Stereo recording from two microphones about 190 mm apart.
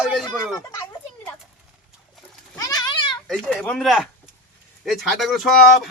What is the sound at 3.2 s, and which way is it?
A man's voice, 5° left (ahead or behind).